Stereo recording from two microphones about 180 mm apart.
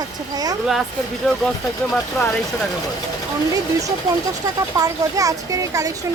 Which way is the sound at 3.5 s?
20° right (ahead or behind).